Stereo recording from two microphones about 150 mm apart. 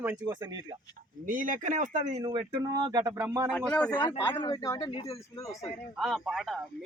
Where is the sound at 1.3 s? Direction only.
65° right (ahead or behind).